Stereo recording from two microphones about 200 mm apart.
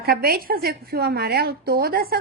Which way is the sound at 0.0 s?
50° right (ahead or behind).